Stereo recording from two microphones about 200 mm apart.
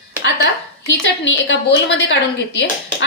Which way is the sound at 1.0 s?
65° left (ahead or behind).